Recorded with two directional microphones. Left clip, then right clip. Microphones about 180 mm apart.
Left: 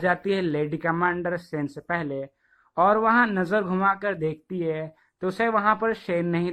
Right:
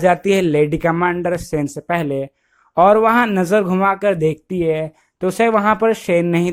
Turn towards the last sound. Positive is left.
turn(degrees=-40)  # may be behind; listen again after turning